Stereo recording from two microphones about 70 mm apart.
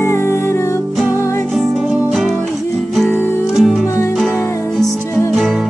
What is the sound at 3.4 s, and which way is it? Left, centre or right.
Music, centre.